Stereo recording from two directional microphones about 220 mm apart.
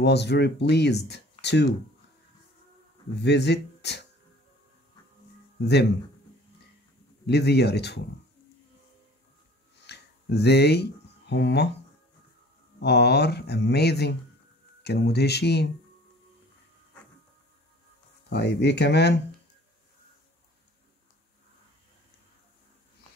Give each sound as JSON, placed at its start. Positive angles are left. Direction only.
{"t": 0.0, "sound": "speech", "side_deg": 50}
{"t": 3.2, "sound": "speech", "side_deg": 50}
{"t": 5.6, "sound": "speech", "side_deg": 50}
{"t": 7.2, "sound": "speech", "side_deg": 50}
{"t": 9.8, "sound": "a sound", "side_deg": 50}
{"t": 12.8, "sound": "speech", "side_deg": 50}
{"t": 18.3, "sound": "speech", "side_deg": 50}